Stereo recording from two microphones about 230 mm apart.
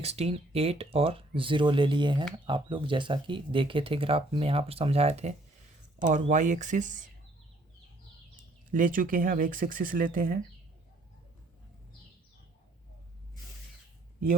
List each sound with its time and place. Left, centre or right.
0.0 s speech: right
8.7 s speech: right